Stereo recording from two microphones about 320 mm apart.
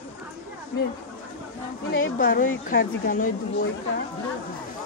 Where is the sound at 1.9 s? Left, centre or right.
Left.